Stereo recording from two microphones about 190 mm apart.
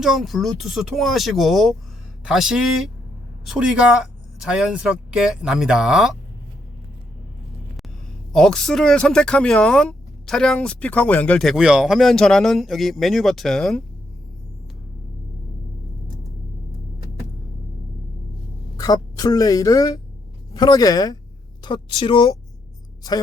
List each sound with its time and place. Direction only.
0.0 s speech: centre (ahead or behind)
8.3 s speech: 5° left (ahead or behind)
18.8 s a woman's voice: 20° left (ahead or behind)